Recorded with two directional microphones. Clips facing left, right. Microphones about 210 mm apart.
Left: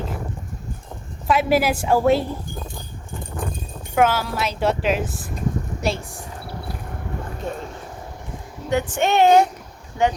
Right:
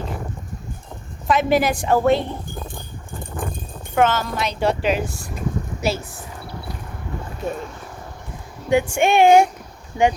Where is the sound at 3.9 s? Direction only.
10° left (ahead or behind).